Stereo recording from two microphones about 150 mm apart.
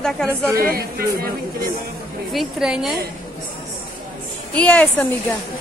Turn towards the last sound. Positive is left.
turn(degrees=10)  # may be behind; listen again after turning